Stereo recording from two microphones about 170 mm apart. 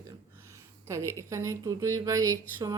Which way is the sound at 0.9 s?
20° right (ahead or behind).